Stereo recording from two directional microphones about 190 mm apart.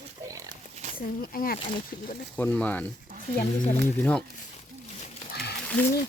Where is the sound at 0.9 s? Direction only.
50° left (ahead or behind).